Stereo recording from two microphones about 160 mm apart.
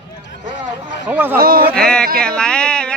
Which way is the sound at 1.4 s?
65° right (ahead or behind).